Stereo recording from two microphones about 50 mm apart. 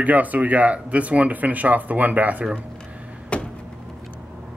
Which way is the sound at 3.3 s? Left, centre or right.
Left.